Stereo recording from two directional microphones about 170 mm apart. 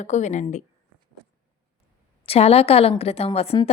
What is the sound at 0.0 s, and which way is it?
Speech, 45° left (ahead or behind).